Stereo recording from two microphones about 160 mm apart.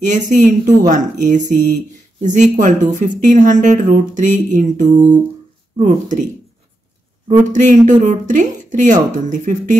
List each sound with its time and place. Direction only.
0.3 s speech: 55° right (ahead or behind)